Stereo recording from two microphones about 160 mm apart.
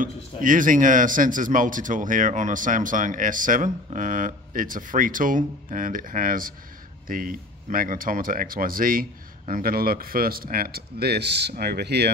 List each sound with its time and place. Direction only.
0.0 s speech: 55° right (ahead or behind); by 12.1 s 90° right